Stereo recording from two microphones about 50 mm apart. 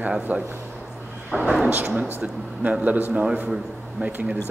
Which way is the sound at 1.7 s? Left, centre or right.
Right.